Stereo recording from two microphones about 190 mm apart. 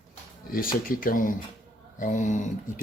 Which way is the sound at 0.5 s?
50° left (ahead or behind).